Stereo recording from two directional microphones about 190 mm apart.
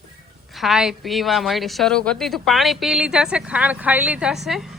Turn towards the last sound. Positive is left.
turn(degrees=0)  # may be behind; listen again after turning